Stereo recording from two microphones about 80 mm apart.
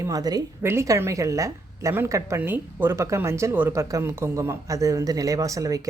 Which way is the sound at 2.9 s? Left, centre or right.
Right.